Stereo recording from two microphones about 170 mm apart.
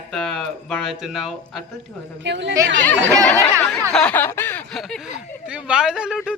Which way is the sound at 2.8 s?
10° left (ahead or behind).